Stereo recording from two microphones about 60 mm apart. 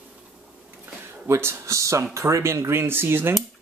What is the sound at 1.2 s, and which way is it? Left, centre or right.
A man's voice, right.